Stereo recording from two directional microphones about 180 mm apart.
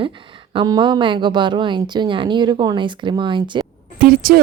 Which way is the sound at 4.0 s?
55° right (ahead or behind).